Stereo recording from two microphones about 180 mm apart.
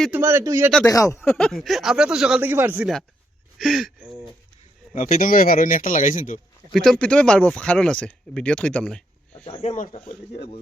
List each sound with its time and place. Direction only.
0.1 s speech: 15° right (ahead or behind)
0.9 s speech: 15° left (ahead or behind); by 2.9 s 10° right (ahead or behind)
3.6 s speech: centre (ahead or behind)
4.9 s speech: 40° left (ahead or behind)
6.7 s speech: centre (ahead or behind)
9.5 s speech: 40° left (ahead or behind)